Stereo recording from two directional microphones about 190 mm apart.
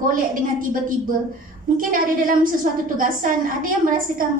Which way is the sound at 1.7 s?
45° right (ahead or behind).